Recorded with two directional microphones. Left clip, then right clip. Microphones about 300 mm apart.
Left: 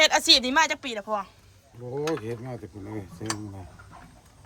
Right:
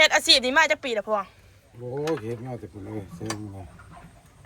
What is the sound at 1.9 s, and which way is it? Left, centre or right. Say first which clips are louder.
Speech: right 1 dB; centre.